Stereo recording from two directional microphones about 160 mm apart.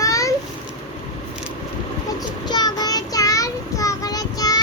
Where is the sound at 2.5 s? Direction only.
25° left (ahead or behind).